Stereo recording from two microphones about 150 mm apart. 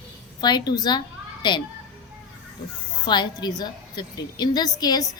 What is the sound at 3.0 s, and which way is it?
A woman's voice, 30° left (ahead or behind).